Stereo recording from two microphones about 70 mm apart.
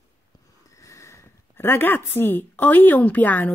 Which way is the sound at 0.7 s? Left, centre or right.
Left.